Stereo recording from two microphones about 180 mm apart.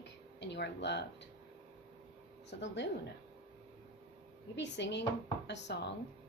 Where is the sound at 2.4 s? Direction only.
80° left.